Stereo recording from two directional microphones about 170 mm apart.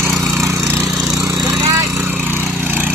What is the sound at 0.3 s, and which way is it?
Vehicle, 15° right (ahead or behind).